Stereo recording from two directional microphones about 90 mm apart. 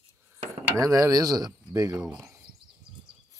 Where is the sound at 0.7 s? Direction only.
40° right (ahead or behind).